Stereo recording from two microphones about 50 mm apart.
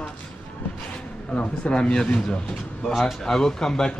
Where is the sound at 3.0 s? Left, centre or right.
Centre.